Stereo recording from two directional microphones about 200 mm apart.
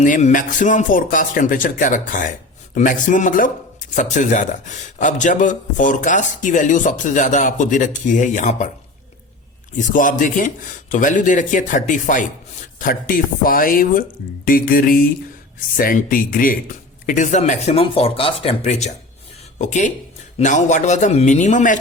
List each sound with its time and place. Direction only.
0.0 s a man's voice: 40° left (ahead or behind)
9.7 s a man's voice: 40° left (ahead or behind)